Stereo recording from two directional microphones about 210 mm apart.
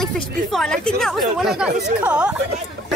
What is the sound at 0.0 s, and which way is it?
Speech, centre (ahead or behind).